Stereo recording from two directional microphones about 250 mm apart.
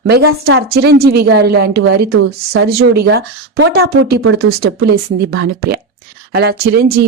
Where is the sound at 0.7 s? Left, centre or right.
Right.